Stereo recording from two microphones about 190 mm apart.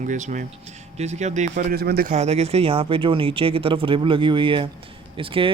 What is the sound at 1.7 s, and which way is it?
Speech, 55° right (ahead or behind).